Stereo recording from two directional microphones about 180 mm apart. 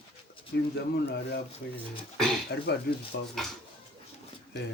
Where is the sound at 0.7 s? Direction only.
65° left (ahead or behind).